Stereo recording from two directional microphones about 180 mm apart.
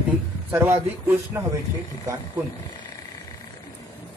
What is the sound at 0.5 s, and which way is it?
Speech, 15° right (ahead or behind).